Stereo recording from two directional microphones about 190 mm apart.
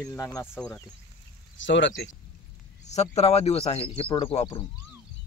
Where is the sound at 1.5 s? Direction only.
75° left (ahead or behind).